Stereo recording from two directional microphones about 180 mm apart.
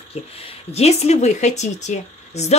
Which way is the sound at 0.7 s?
35° left (ahead or behind).